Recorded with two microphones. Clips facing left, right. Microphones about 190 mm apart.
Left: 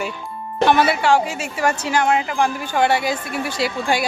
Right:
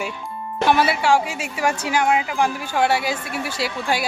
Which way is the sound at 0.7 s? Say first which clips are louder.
Left 1 dB; 10° right (ahead or behind).